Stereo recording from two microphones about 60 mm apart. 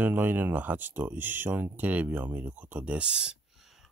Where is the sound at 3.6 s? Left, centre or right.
Centre.